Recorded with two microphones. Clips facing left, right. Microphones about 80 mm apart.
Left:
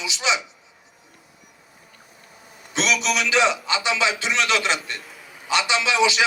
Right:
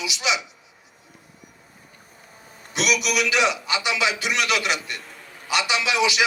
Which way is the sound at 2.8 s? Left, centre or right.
Left.